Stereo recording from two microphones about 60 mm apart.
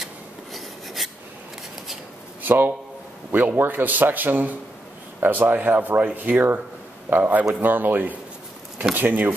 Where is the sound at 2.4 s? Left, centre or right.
Right.